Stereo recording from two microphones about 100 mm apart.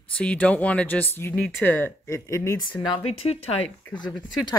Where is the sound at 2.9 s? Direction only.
85° left.